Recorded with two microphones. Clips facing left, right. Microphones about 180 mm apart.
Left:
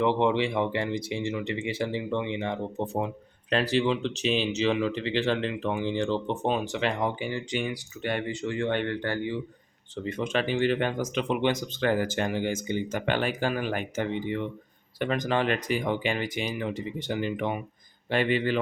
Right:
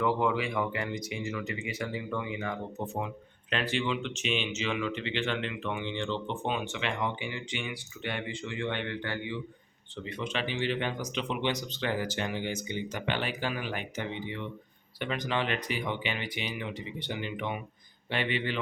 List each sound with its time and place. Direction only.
0.0 s speech: 25° left (ahead or behind); by 18.6 s 45° left (ahead or behind)